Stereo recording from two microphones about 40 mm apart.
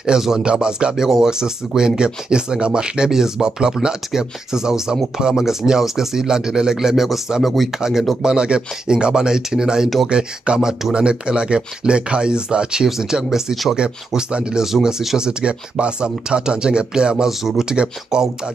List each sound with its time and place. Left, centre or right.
0.0 s speech: centre
3.1 s speech: centre
8.2 s speech: right
13.7 s speech: right
14.6 s speech: centre
17.3 s speech: centre
17.6 s speech: centre